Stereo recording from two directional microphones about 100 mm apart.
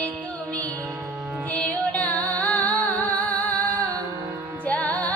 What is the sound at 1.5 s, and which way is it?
Music, 15° left (ahead or behind).